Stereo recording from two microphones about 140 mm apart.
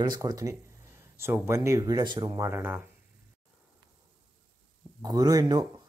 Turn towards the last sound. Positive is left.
turn(degrees=-30)  # may be behind; listen again after turning